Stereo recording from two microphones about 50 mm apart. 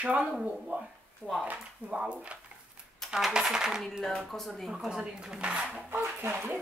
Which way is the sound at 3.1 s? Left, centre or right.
Centre.